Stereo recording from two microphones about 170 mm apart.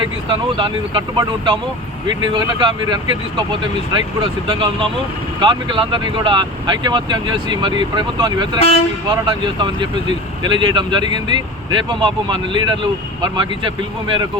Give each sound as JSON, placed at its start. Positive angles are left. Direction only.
{"t": 0.0, "sound": "speech", "side_deg": -30}
{"t": 8.5, "sound": "speech", "side_deg": 35}
{"t": 9.0, "sound": "speech", "side_deg": -25}